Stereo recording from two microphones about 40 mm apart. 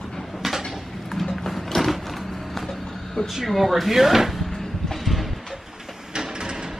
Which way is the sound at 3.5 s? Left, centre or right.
Centre.